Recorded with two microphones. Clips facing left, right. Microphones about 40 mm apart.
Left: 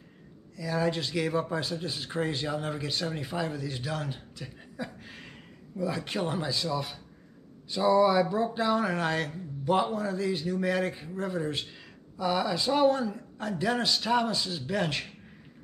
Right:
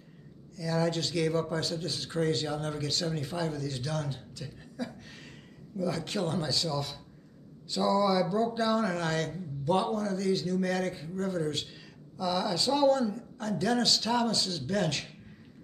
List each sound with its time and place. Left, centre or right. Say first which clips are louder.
0.6 s speech: left 1 dB; centre